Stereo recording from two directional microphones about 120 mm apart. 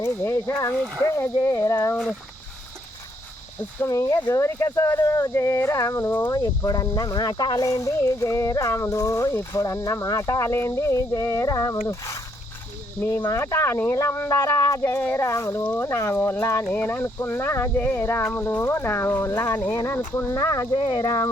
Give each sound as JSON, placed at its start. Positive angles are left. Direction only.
{"t": 0.0, "sound": "speech", "side_deg": 20}
{"t": 0.7, "sound": "speech", "side_deg": 5}
{"t": 1.0, "sound": "speech", "side_deg": 25}
{"t": 3.6, "sound": "speech", "side_deg": 15}
{"t": 3.9, "sound": "speech", "side_deg": 30}
{"t": 6.3, "sound": "speech", "side_deg": 30}
{"t": 19.3, "sound": "speech", "side_deg": 30}
{"t": 21.0, "sound": "speech", "side_deg": 25}